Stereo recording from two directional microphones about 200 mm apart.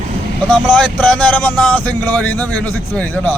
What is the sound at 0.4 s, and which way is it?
A man's voice, 5° left (ahead or behind).